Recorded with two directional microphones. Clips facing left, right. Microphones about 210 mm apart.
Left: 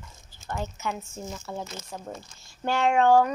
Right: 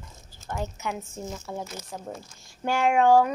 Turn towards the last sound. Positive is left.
turn(degrees=-10)  # may be behind; listen again after turning